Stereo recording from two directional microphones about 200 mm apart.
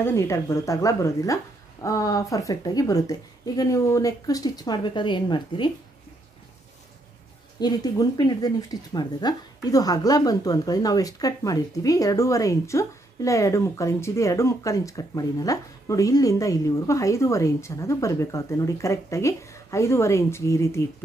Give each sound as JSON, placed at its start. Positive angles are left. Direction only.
{"t": 0.0, "sound": "speech", "side_deg": 15}
{"t": 7.6, "sound": "speech", "side_deg": 20}